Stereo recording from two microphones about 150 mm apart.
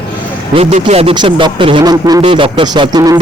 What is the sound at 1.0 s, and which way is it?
A man's voice, 30° right (ahead or behind).